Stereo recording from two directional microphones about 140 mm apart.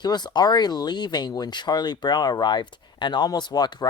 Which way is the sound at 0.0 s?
30° left (ahead or behind).